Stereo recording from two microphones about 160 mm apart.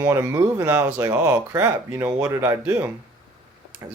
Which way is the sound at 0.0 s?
15° right (ahead or behind).